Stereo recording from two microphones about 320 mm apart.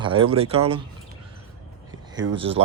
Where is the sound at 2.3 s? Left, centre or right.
Centre.